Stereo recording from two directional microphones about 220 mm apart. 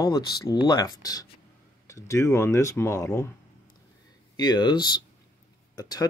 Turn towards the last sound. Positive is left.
turn(degrees=15)  # may be behind; listen again after turning